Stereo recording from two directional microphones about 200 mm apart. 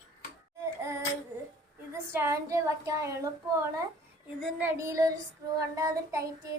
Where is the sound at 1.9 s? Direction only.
15° right (ahead or behind).